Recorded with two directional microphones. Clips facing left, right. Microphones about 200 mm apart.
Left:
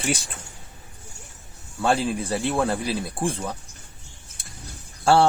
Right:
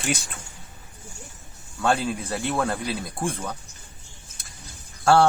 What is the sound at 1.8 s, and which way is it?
Speech, 30° left (ahead or behind).